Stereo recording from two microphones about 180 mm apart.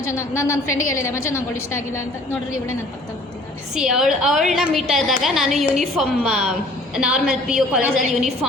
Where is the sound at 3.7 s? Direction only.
5° right (ahead or behind).